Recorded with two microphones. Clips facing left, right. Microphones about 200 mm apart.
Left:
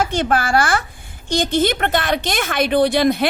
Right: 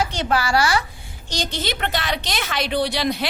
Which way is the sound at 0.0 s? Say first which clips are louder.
Left 3 dB; 50° left (ahead or behind).